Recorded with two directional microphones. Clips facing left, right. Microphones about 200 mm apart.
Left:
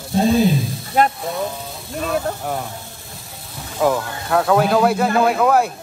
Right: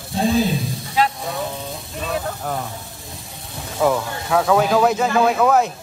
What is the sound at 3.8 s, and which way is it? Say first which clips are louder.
Speech: even; centre (ahead or behind).